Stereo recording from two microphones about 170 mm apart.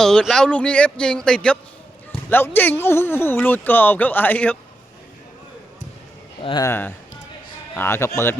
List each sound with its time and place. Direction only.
0.0 s speech: 5° left (ahead or behind)
6.4 s speech: 25° left (ahead or behind)
6.7 s speech: 10° left (ahead or behind)